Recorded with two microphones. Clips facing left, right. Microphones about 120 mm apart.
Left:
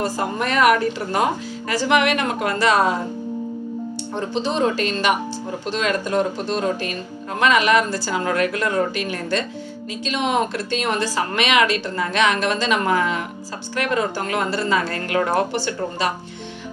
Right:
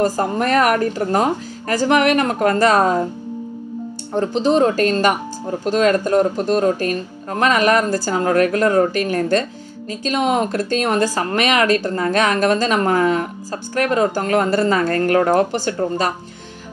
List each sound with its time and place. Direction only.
0.0 s speech: 45° right (ahead or behind)
4.1 s speech: 45° right (ahead or behind)